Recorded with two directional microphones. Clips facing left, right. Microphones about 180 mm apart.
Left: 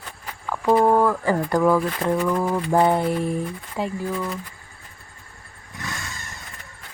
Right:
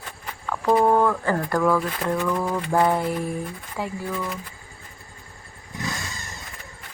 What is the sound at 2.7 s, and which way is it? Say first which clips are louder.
Mantra: left 2 dB; 20° left (ahead or behind).